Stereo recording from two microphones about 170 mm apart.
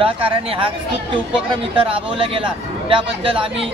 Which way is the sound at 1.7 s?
30° right (ahead or behind).